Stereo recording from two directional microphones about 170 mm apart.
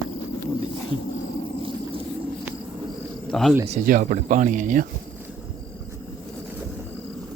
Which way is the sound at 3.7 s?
50° right (ahead or behind).